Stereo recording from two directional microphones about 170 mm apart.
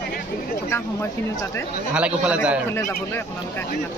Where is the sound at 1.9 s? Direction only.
5° right (ahead or behind).